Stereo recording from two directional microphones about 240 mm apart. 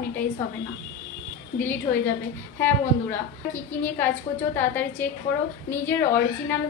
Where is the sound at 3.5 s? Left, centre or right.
Centre.